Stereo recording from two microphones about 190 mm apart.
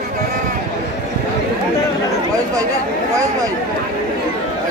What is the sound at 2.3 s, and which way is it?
Speech, 20° right (ahead or behind).